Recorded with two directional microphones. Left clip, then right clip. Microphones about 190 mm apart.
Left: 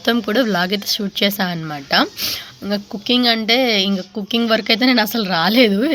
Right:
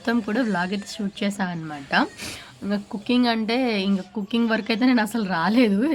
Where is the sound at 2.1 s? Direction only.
15° left (ahead or behind).